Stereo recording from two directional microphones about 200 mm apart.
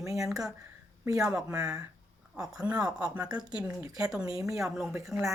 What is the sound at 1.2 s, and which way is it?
A woman's voice, 10° right (ahead or behind).